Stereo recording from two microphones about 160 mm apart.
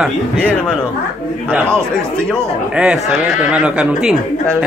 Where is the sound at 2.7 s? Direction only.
5° right (ahead or behind).